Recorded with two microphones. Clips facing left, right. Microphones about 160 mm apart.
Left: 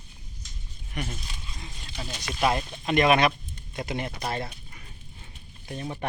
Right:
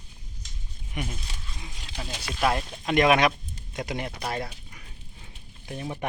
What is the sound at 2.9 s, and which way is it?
Speech, 15° right (ahead or behind).